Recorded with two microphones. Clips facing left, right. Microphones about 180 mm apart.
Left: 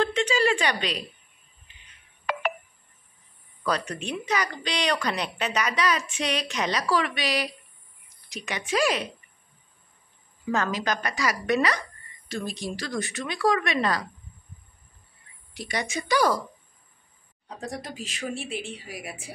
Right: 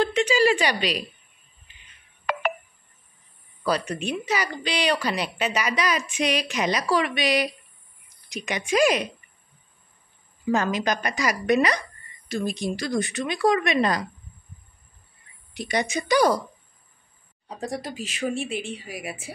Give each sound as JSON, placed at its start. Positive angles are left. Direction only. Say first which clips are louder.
{"t": 0.0, "sound": "a sound", "louder": "right 3 dB", "side_deg": -10}
{"t": 3.6, "sound": "a woman's voice", "louder": "right 3 dB", "side_deg": -10}
{"t": 10.5, "sound": "a woman's voice", "louder": "right 3 dB", "side_deg": -15}
{"t": 15.5, "sound": "speech", "louder": "right 5 dB", "side_deg": -20}
{"t": 17.6, "sound": "a woman's voice", "louder": "right 4 dB", "side_deg": -5}